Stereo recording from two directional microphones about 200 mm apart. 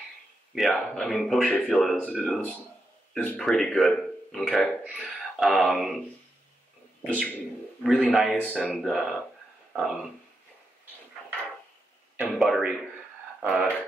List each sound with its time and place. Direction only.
0.6 s a man's voice: centre (ahead or behind)
7.0 s a man's voice: 5° left (ahead or behind)
12.2 s speech: centre (ahead or behind)